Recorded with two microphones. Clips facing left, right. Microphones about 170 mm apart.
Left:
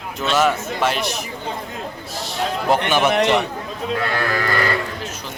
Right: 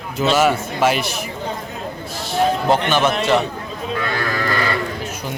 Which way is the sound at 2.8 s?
15° left (ahead or behind).